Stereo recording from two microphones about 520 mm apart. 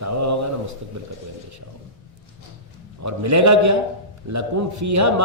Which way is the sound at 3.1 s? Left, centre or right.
Right.